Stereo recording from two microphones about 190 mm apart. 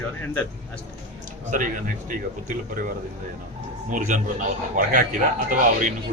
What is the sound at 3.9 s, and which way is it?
A man's voice, 45° right (ahead or behind).